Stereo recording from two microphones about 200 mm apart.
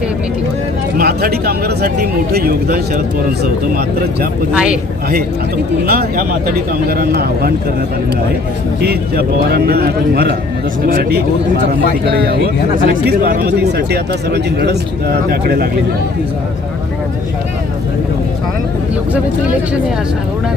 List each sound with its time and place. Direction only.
0.9 s speech: 50° right (ahead or behind)
4.5 s speech: 5° right (ahead or behind)
5.8 s speech: 50° right (ahead or behind)
8.8 s speech: 50° right (ahead or behind)